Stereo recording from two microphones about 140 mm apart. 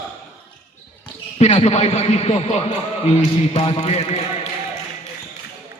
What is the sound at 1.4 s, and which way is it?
A man's voice, 50° left (ahead or behind).